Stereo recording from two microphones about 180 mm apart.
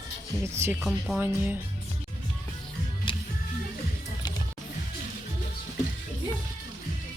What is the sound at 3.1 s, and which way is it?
Music, 30° left (ahead or behind).